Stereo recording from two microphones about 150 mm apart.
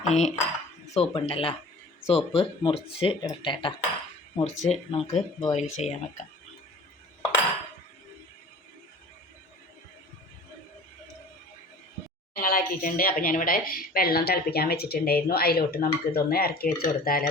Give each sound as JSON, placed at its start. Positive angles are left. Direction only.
{"t": 0.0, "sound": "dishes", "side_deg": 50}
{"t": 0.9, "sound": "speech", "side_deg": 40}
{"t": 4.4, "sound": "speech", "side_deg": 50}
{"t": 12.4, "sound": "speech", "side_deg": 70}